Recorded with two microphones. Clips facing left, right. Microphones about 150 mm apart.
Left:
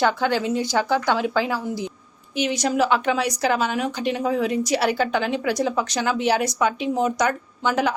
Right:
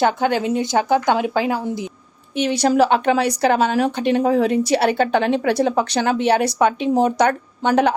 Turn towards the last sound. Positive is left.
turn(degrees=-60)  # may be behind; listen again after turning